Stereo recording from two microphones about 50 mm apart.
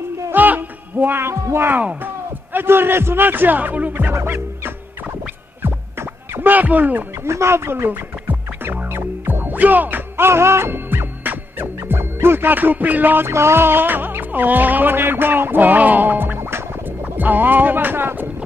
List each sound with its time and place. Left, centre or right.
0.3 s music: right
1.7 s a man's voice: right
5.6 s music: right
6.5 s music: right
7.2 s music: right
10.2 s music: right
13.3 s music: right
17.2 s speech: right